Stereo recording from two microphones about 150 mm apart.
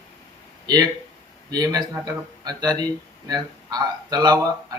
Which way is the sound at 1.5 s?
25° right (ahead or behind).